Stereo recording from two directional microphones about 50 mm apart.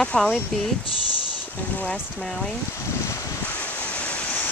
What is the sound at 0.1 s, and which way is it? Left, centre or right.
Rain, centre.